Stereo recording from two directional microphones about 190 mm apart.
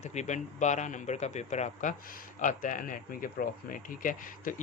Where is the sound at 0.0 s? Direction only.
35° left (ahead or behind).